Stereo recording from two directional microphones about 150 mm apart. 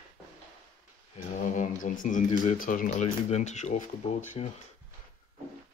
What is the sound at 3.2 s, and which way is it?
Speech, 50° left (ahead or behind).